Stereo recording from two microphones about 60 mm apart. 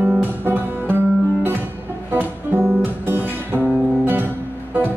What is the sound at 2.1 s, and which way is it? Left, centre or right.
Music, right.